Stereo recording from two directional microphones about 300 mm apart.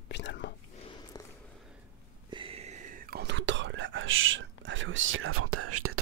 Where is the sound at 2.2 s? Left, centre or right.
Centre; by 6.0 s right.